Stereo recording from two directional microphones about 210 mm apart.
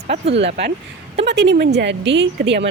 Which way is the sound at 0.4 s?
55° right (ahead or behind).